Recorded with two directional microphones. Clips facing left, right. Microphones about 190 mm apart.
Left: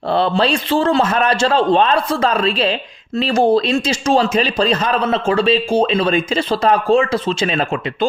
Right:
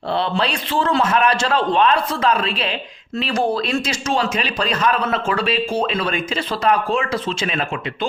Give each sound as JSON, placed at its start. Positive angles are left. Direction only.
{"t": 0.1, "sound": "a man's voice", "side_deg": 35}